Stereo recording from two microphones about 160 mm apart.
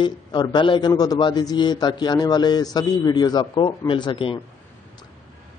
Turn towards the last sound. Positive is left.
turn(degrees=30)  # may be behind; listen again after turning